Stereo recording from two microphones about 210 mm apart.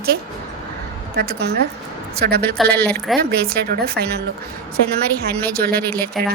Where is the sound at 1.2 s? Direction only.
50° right (ahead or behind).